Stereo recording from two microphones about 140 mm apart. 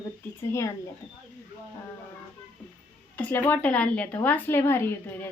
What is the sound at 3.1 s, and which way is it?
Speech, 15° left (ahead or behind).